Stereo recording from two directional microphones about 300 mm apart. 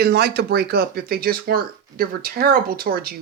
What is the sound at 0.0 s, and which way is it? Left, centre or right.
Speech, right.